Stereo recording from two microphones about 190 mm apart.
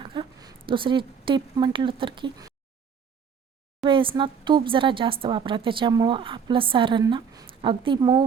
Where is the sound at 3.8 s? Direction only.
25° right (ahead or behind).